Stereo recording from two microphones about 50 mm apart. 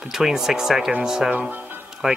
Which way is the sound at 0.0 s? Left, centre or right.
Centre.